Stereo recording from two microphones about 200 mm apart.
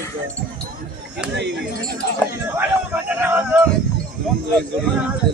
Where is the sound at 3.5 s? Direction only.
5° right (ahead or behind).